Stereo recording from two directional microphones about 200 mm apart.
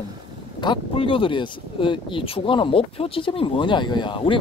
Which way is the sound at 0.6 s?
25° left (ahead or behind).